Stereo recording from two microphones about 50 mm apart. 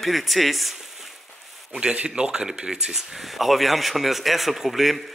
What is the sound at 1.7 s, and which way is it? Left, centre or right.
Speech, centre.